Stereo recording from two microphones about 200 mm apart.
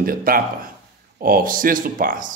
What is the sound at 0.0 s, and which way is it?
Speech, 45° right (ahead or behind).